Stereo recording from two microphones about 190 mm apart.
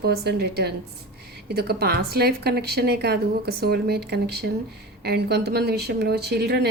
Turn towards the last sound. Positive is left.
turn(degrees=-60)  # may be behind; listen again after turning